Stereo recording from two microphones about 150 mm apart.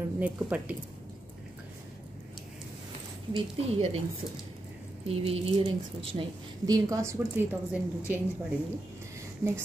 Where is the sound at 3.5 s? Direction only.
40° right (ahead or behind).